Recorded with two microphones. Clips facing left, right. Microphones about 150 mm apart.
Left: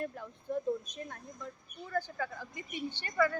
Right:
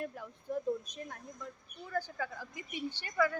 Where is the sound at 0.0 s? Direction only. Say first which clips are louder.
Left 2 dB; 5° right (ahead or behind).